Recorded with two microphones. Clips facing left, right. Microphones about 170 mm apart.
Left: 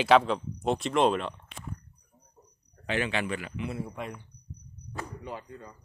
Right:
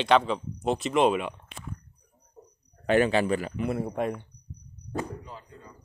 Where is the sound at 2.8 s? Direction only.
45° right (ahead or behind).